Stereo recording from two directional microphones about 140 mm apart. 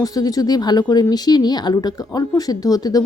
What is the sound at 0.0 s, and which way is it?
A woman's voice, 25° left (ahead or behind).